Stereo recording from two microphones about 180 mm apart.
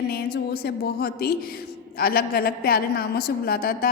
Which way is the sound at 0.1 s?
60° left (ahead or behind).